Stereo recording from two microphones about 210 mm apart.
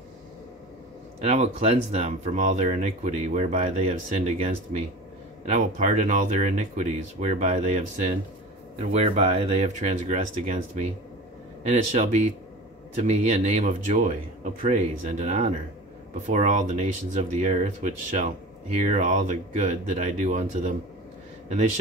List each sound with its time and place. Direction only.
1.2 s speech: 30° right (ahead or behind)
5.5 s speech: 35° right (ahead or behind)